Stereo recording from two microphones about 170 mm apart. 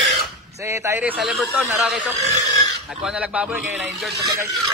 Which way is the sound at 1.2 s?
Centre (ahead or behind).